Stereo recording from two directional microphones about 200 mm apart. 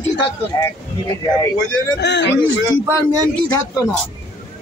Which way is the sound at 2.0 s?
60° left (ahead or behind).